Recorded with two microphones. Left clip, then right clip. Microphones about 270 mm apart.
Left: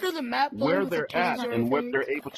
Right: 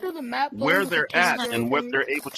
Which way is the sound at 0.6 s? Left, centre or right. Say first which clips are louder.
Right 4 dB; right.